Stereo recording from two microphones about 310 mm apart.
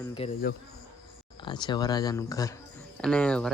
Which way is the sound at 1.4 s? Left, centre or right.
Centre.